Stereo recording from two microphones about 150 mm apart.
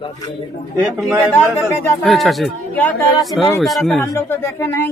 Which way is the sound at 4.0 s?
15° left (ahead or behind).